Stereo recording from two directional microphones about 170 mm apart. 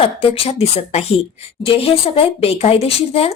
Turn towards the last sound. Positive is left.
turn(degrees=35)  # may be behind; listen again after turning